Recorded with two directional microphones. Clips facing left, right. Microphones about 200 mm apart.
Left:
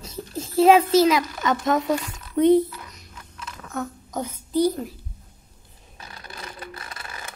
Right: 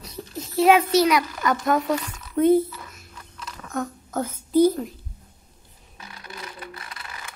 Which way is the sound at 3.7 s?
5° left (ahead or behind).